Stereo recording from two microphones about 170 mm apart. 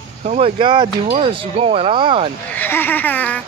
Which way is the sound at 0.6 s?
30° right (ahead or behind).